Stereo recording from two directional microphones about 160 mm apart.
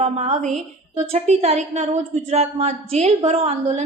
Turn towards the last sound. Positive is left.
turn(degrees=-40)  # may be behind; listen again after turning